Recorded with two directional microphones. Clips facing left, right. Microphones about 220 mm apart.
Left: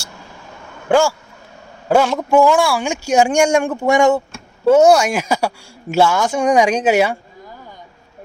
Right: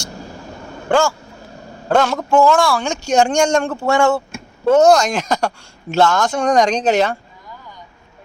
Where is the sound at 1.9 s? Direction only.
10° left (ahead or behind).